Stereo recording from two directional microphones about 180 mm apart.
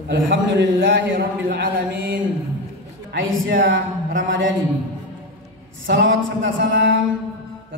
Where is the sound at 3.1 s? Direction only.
65° right (ahead or behind).